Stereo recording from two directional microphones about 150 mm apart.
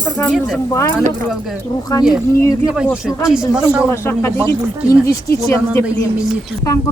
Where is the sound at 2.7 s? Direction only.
5° right (ahead or behind).